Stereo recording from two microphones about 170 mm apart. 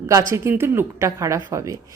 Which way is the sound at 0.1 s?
15° right (ahead or behind).